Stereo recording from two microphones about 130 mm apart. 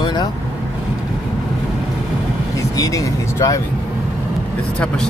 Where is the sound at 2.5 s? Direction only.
25° left (ahead or behind).